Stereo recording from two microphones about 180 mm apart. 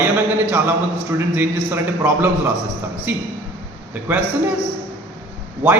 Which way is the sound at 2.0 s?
10° right (ahead or behind).